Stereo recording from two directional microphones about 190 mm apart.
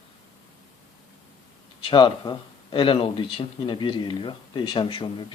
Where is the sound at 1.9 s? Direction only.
25° left (ahead or behind).